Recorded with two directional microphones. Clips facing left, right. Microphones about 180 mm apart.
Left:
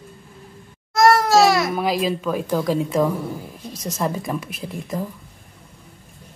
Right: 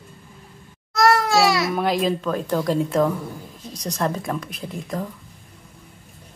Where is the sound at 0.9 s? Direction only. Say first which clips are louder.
Left 3 dB; 45° left (ahead or behind).